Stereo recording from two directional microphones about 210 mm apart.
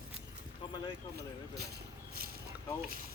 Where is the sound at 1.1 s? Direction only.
50° right (ahead or behind).